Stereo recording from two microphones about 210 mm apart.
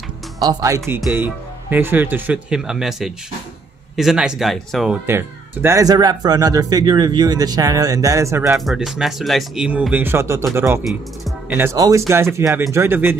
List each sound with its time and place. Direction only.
0.4 s speech: 15° right (ahead or behind); by 4.9 s centre (ahead or behind)
5.0 s speech: 10° right (ahead or behind)
8.5 s speech: centre (ahead or behind)